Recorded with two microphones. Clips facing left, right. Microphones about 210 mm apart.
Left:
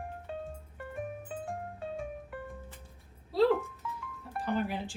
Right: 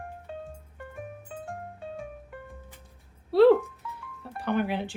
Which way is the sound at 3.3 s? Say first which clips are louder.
Right 8 dB; 70° right (ahead or behind).